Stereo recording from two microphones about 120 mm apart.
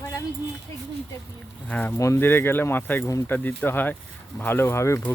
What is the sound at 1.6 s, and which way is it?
Speech, 15° left (ahead or behind).